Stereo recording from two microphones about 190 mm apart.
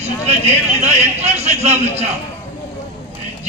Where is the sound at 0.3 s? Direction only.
35° right (ahead or behind).